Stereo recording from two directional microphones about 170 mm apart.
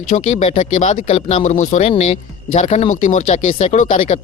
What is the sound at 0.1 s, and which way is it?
Speech, 45° left (ahead or behind).